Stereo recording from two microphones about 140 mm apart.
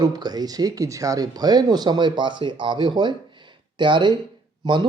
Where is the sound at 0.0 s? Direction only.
30° right (ahead or behind).